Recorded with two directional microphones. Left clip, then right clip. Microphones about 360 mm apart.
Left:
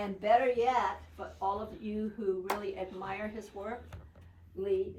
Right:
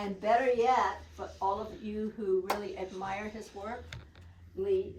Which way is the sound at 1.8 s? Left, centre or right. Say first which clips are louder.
Right 2 dB; centre.